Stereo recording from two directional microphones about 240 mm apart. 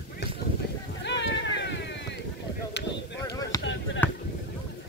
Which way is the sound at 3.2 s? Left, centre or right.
Centre.